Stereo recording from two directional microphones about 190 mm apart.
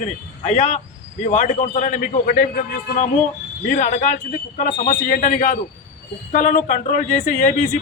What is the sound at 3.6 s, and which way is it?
A man's voice, 40° left (ahead or behind).